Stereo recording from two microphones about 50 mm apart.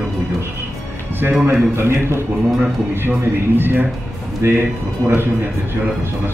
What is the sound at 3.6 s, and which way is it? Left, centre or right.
Speech, right.